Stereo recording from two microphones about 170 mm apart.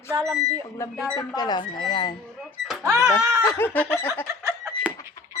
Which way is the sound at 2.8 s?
20° right (ahead or behind).